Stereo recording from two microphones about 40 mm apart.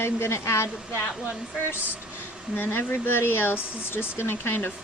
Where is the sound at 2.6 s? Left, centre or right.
Left.